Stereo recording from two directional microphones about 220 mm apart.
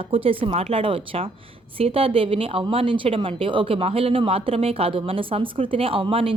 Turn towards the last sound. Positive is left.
turn(degrees=-25)  # may be behind; listen again after turning